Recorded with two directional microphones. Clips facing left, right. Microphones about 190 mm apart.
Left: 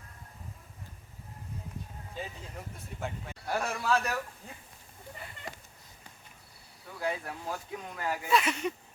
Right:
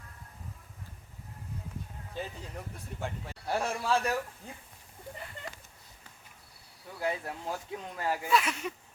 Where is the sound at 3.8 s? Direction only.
30° right (ahead or behind).